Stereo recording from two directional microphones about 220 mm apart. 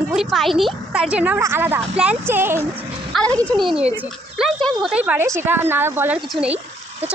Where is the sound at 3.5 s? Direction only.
20° right (ahead or behind).